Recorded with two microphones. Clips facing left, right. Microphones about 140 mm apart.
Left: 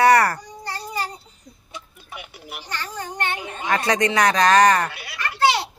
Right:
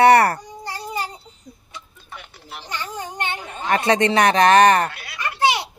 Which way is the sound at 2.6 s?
20° right (ahead or behind).